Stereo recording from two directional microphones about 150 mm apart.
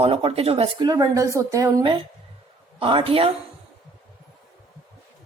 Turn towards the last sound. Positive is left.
turn(degrees=-40)  # may be behind; listen again after turning